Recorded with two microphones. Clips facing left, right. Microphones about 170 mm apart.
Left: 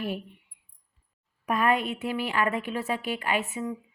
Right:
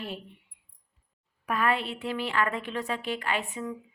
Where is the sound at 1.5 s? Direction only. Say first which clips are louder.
Left 3 dB; 15° left (ahead or behind).